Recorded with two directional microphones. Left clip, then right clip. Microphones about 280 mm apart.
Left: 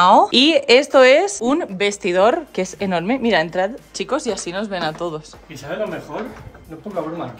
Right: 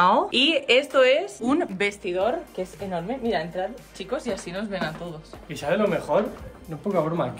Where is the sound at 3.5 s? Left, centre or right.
Left.